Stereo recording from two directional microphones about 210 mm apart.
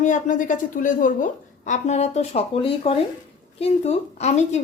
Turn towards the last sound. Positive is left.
turn(degrees=30)  # may be behind; listen again after turning